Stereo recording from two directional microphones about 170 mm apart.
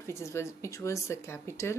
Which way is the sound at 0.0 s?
15° left (ahead or behind).